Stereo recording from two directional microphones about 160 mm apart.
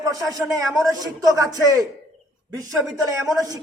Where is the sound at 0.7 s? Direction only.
20° right (ahead or behind).